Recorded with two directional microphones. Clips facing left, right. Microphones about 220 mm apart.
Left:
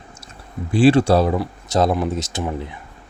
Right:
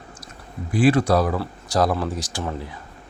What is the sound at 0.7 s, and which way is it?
Speech, 30° left (ahead or behind).